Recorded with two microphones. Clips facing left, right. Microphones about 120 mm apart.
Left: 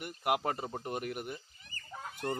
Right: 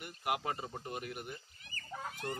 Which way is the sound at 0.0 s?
55° left (ahead or behind).